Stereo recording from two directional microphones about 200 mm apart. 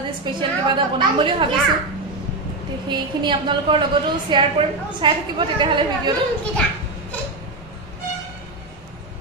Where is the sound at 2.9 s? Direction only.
25° right (ahead or behind).